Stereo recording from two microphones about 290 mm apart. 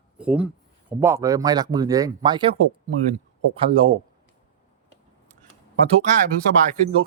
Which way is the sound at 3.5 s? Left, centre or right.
Centre.